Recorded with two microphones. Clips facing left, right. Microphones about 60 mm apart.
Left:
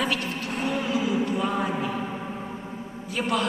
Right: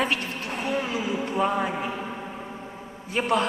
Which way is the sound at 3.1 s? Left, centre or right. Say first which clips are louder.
Right 2 dB; right.